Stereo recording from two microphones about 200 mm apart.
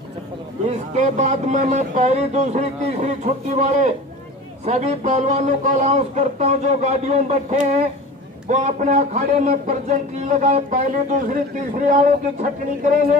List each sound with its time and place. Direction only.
0.7 s a man's voice: 35° right (ahead or behind)